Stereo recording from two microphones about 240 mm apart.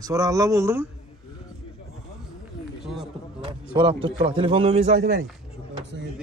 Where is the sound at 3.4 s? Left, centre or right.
Right.